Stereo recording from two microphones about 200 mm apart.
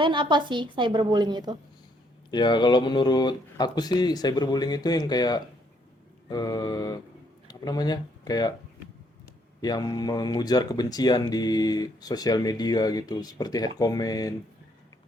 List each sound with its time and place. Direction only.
0.0 s a woman's voice: 25° right (ahead or behind)
2.3 s speech: 20° left (ahead or behind)
9.6 s speech: 20° left (ahead or behind)